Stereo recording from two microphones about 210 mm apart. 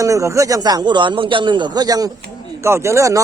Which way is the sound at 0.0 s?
15° right (ahead or behind).